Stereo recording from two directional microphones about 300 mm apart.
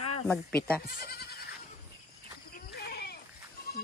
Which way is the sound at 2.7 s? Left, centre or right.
Left.